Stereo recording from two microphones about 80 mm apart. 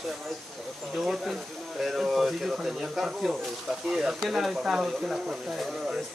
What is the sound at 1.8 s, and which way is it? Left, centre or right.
Speech, centre.